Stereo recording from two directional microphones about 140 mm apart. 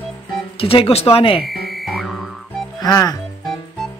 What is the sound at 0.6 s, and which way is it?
Speech, 40° left (ahead or behind).